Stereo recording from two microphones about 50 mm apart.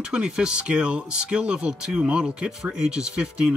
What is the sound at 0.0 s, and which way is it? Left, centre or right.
Speech, centre.